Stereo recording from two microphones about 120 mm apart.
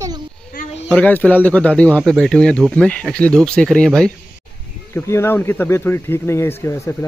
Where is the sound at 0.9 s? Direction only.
15° left (ahead or behind).